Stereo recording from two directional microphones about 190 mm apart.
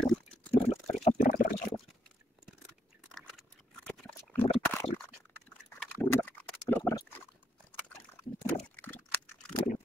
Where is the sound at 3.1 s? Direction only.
Centre (ahead or behind).